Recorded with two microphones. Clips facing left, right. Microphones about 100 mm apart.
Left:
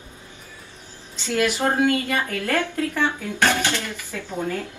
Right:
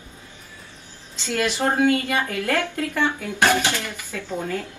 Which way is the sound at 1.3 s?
20° right (ahead or behind).